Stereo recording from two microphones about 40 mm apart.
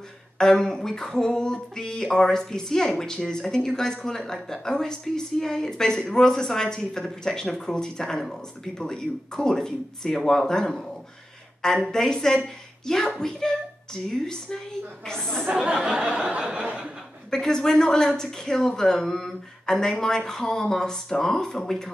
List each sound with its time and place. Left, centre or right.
0.4 s speech: centre
15.7 s a sound: centre
17.3 s speech: centre